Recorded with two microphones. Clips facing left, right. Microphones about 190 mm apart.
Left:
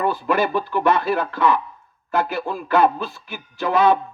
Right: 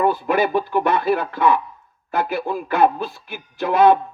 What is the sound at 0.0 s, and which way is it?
Speech, 55° right (ahead or behind).